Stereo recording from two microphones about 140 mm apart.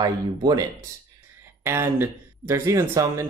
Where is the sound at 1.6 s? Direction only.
20° right (ahead or behind).